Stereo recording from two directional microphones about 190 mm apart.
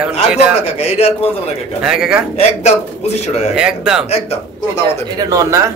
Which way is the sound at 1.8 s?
5° right (ahead or behind).